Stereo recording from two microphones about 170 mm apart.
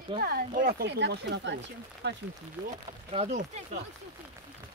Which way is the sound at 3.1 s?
40° right (ahead or behind).